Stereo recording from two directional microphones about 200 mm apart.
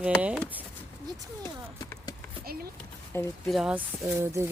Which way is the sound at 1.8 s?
15° left (ahead or behind).